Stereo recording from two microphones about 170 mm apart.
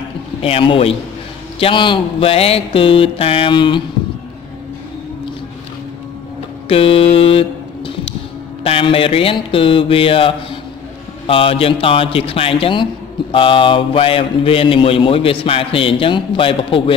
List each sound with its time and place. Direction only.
0.4 s a man's voice: 35° left (ahead or behind)
6.7 s a sound: 35° left (ahead or behind)
8.6 s a man's voice: 35° left (ahead or behind)